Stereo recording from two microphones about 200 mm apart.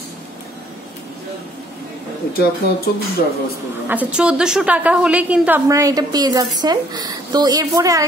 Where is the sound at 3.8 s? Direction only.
5° right (ahead or behind).